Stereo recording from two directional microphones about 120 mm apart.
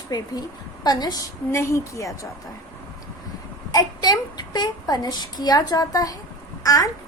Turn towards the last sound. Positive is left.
turn(degrees=30)  # may be behind; listen again after turning